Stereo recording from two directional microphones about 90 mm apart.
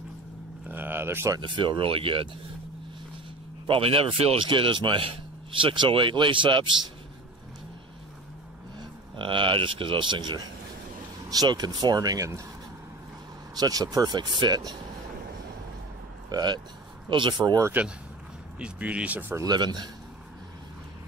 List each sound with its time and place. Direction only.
0.7 s cattle: 20° right (ahead or behind)
1.4 s speech: 60° right (ahead or behind); by 2.2 s 80° right
3.6 s speech: 85° right; by 6.7 s 65° right (ahead or behind)
9.1 s speech: 65° right (ahead or behind)
11.2 s speech: 45° right (ahead or behind)
13.6 s speech: 45° right (ahead or behind)
16.3 s speech: 50° right (ahead or behind)
18.6 s speech: 15° right (ahead or behind)
19.4 s speech: 50° right (ahead or behind)